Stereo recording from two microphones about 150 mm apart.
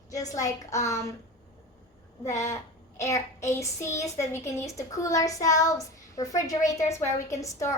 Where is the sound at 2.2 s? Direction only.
20° left (ahead or behind).